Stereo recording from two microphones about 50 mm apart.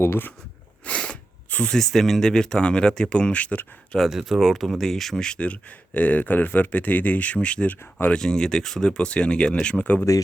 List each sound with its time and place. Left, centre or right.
0.9 s a sound: left
1.7 s speech: centre; by 3.7 s left
4.1 s speech: centre; by 5.5 s left
5.9 s speech: left
7.7 s speech: left
8.1 s speech: centre